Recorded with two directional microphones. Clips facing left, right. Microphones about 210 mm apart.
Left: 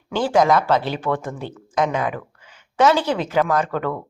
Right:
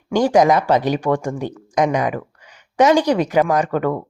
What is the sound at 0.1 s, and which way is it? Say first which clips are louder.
A woman's voice: right 3 dB; 15° right (ahead or behind).